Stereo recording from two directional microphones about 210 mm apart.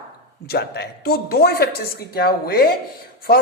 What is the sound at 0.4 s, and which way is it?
A woman's voice, 50° left (ahead or behind).